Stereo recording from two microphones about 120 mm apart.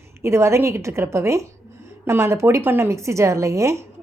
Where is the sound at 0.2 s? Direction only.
20° right (ahead or behind).